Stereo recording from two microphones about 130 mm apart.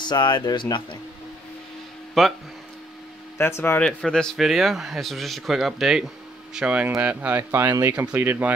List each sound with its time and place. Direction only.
0.0 s speech: 35° left (ahead or behind)
2.2 s speech: 5° left (ahead or behind)
3.3 s speech: 20° left (ahead or behind)
3.8 s speech: 5° left (ahead or behind); by 8.5 s 15° right (ahead or behind)